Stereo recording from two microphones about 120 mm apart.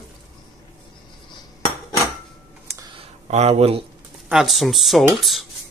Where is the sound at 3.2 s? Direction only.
65° right (ahead or behind).